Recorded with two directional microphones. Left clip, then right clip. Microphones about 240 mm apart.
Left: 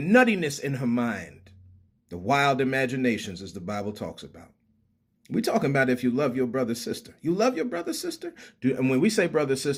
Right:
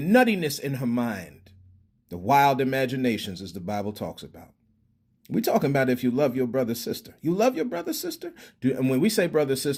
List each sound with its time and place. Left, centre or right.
0.0 s speech: right